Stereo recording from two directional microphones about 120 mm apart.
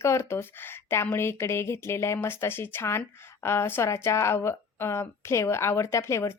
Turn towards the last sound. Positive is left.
turn(degrees=25)  # may be behind; listen again after turning